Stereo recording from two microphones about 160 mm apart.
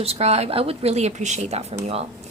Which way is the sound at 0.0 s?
40° right (ahead or behind).